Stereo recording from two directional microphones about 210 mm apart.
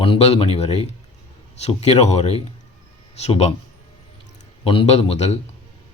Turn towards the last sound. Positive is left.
turn(degrees=30)  # may be behind; listen again after turning